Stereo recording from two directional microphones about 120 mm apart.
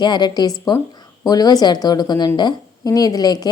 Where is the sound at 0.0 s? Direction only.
35° left (ahead or behind).